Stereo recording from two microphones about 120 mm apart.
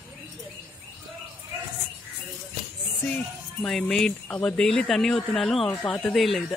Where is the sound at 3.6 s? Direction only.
5° left (ahead or behind).